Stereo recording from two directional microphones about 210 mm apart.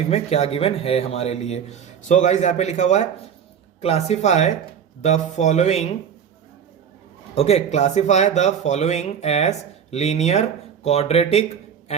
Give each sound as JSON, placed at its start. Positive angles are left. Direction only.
{"t": 0.1, "sound": "speech", "side_deg": 30}
{"t": 7.3, "sound": "speech", "side_deg": 30}